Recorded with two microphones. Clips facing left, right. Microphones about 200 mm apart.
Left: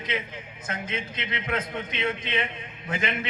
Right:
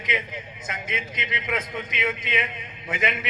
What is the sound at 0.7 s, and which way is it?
A man's voice, 30° left (ahead or behind).